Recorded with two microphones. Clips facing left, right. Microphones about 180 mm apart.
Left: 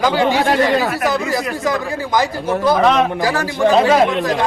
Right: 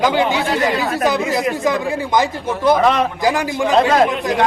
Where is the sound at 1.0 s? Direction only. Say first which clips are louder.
Right 1 dB; 20° right (ahead or behind).